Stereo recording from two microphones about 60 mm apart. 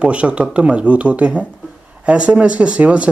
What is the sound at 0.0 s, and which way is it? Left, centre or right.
Speech, centre.